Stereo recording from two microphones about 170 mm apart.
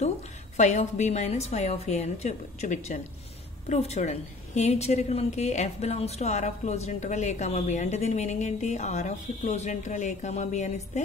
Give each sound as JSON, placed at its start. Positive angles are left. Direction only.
{"t": 0.6, "sound": "a woman's voice", "side_deg": 45}